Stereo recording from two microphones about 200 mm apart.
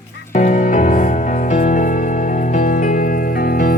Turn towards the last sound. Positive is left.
turn(degrees=45)  # may be behind; listen again after turning